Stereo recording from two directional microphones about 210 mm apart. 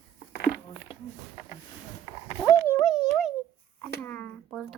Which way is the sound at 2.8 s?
Centre (ahead or behind).